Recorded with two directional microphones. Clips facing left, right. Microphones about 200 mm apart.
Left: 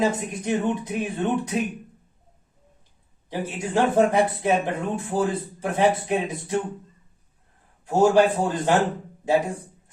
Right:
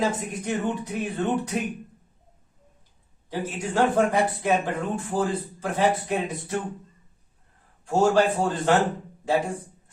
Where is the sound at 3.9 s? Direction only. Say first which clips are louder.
Left 3 dB; 20° left (ahead or behind).